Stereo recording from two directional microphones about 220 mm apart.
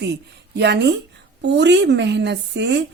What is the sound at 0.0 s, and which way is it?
A woman's voice, 50° right (ahead or behind).